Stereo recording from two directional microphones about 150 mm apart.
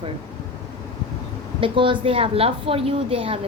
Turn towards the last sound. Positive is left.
turn(degrees=-40)  # may be behind; listen again after turning